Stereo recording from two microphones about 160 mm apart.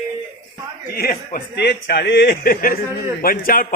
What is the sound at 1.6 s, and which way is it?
A man's voice, 90° left.